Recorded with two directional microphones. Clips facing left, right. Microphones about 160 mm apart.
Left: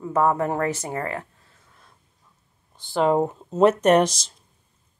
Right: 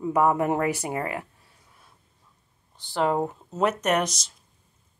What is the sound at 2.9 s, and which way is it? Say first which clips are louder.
Speech: left 4 dB; 20° left (ahead or behind).